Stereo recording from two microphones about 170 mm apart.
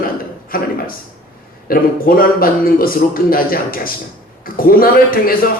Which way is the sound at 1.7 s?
60° left (ahead or behind).